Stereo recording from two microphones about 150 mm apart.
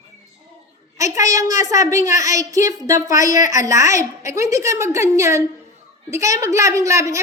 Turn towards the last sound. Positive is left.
turn(degrees=-20)  # may be behind; listen again after turning